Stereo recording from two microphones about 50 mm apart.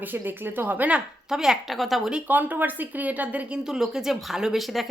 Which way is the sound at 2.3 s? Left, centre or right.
Right.